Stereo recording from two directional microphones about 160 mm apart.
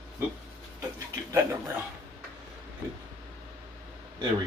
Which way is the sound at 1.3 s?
15° right (ahead or behind).